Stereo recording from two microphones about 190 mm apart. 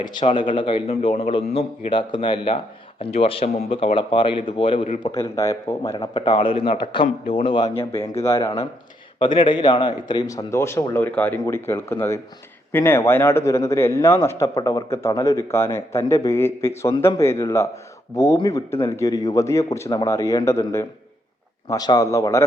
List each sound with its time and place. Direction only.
0.0 s a man's voice: 25° left (ahead or behind)
5.1 s a man's voice: 15° left (ahead or behind)
8.2 s a man's voice: 15° left (ahead or behind)